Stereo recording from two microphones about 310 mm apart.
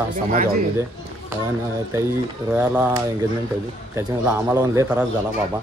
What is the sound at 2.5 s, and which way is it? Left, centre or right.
Speech, centre.